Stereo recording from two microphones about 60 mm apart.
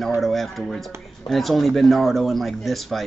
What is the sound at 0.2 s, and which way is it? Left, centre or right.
Speech, centre.